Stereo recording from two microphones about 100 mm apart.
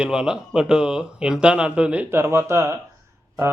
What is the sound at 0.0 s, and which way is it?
Speech, 5° right (ahead or behind).